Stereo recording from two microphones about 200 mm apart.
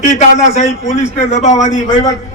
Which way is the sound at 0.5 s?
35° left (ahead or behind).